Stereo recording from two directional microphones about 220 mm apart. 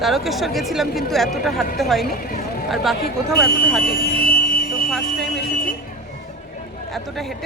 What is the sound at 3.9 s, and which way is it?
Vehicle, 45° left (ahead or behind).